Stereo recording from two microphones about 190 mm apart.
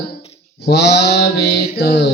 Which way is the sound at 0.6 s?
60° left (ahead or behind).